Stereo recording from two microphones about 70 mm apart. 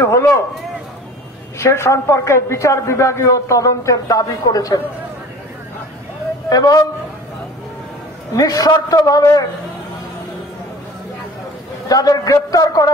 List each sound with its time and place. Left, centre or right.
0.0 s a sound: left
1.6 s a man's voice: left
6.5 s speech: left
8.3 s a man's voice: left
11.9 s a man's voice: left